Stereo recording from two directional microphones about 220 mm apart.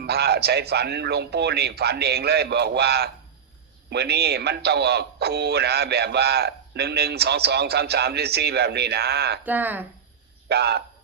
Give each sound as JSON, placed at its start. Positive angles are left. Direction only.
{"t": 0.0, "sound": "a man's voice", "side_deg": -45}
{"t": 9.4, "sound": "speech", "side_deg": -10}
{"t": 10.5, "sound": "a man's voice", "side_deg": -50}